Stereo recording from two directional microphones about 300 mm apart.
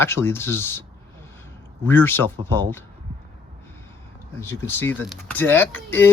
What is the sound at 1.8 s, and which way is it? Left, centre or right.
Speech, centre.